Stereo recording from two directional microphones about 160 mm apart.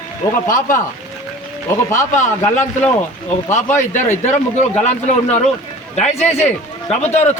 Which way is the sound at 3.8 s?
50° left (ahead or behind).